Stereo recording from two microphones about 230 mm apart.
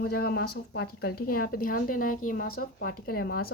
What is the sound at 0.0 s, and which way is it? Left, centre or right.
Speech, left.